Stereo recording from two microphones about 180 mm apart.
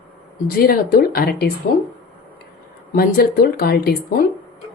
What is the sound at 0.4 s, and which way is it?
Speech, 55° left (ahead or behind).